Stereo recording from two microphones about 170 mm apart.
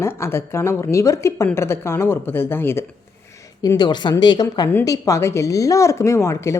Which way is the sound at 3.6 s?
25° left (ahead or behind).